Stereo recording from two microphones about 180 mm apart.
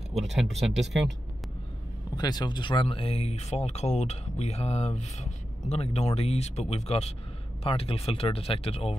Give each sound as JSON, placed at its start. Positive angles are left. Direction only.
{"t": 0.1, "sound": "speech", "side_deg": 0}
{"t": 2.1, "sound": "speech", "side_deg": 20}